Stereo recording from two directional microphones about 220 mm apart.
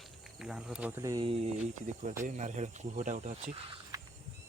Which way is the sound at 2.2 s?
35° right (ahead or behind).